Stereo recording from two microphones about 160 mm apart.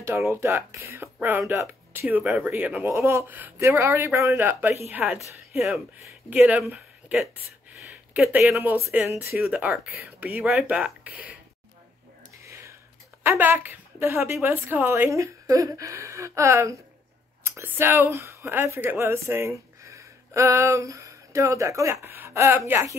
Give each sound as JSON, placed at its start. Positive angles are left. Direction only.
{"t": 0.0, "sound": "a woman's voice", "side_deg": -15}
{"t": 6.4, "sound": "speech", "side_deg": -5}
{"t": 9.3, "sound": "speech", "side_deg": -5}
{"t": 12.4, "sound": "whispering", "side_deg": -20}
{"t": 13.2, "sound": "speech", "side_deg": -15}